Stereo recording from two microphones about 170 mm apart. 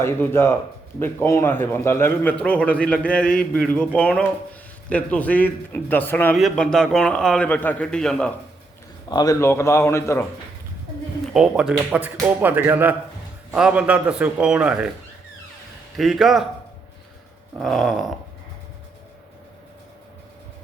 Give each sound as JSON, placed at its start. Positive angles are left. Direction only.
{"t": 0.0, "sound": "a man's voice", "side_deg": 15}
{"t": 6.3, "sound": "a man's voice", "side_deg": 0}
{"t": 9.0, "sound": "a man's voice", "side_deg": 20}
{"t": 11.3, "sound": "speech", "side_deg": -5}
{"t": 16.0, "sound": "a man's voice", "side_deg": 0}
{"t": 17.6, "sound": "a man's voice", "side_deg": 0}